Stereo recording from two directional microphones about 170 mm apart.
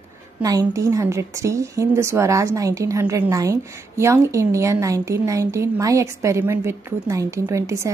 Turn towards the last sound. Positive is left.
turn(degrees=-15)  # may be behind; listen again after turning